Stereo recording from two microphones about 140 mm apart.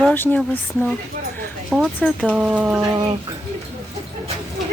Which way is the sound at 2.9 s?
30° right (ahead or behind).